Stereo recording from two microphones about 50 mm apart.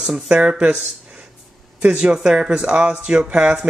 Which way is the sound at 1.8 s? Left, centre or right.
Right.